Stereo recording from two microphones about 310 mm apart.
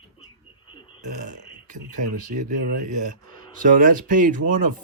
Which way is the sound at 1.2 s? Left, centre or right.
Right.